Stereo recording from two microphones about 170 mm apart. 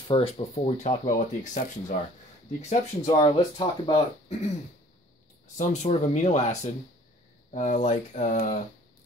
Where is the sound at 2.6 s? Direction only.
40° left (ahead or behind).